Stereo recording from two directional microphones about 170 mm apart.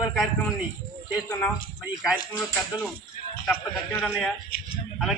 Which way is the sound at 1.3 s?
10° left (ahead or behind).